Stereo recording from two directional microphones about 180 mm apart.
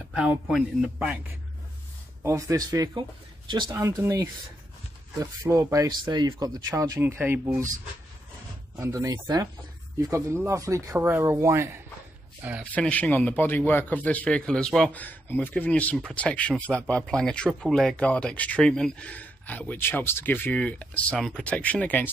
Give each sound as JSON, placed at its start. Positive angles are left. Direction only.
{"t": 0.1, "sound": "speech", "side_deg": -5}
{"t": 2.2, "sound": "speech", "side_deg": -20}
{"t": 8.7, "sound": "speech", "side_deg": -15}
{"t": 12.7, "sound": "a man's voice", "side_deg": 10}